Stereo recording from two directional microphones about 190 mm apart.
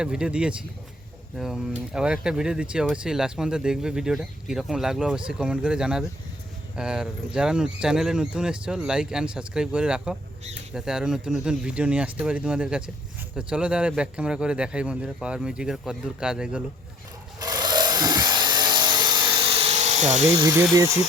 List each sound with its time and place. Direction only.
0.0 s speech: 5° right (ahead or behind)
17.4 s a sound: 20° right (ahead or behind); by 20.2 s 35° right (ahead or behind)
20.4 s speech: 15° right (ahead or behind)